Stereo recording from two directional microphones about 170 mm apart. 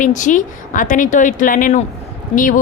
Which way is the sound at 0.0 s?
45° left (ahead or behind).